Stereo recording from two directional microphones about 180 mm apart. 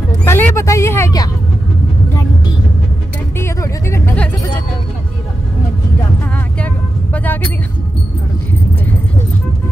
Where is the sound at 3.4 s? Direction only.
15° left (ahead or behind).